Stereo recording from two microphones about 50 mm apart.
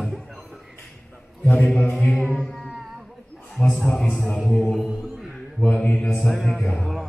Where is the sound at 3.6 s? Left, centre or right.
Left.